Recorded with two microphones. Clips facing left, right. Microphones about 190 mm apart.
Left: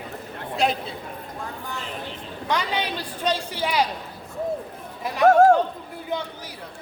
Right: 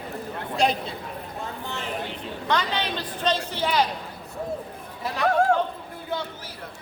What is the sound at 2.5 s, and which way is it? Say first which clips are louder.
A woman's voice: even; 10° left (ahead or behind).